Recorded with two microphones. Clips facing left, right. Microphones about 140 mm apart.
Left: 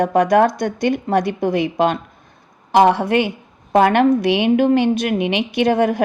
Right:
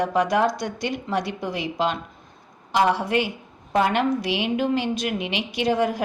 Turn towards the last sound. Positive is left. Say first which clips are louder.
# left 6 dB
turn(degrees=60)  # may be behind; listen again after turning